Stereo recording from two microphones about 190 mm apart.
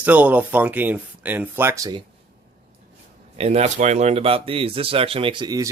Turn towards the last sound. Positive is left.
turn(degrees=-20)  # may be behind; listen again after turning